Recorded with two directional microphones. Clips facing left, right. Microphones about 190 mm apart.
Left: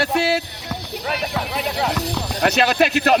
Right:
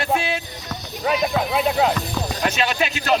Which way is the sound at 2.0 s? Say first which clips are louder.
Left 3 dB; 70° left (ahead or behind).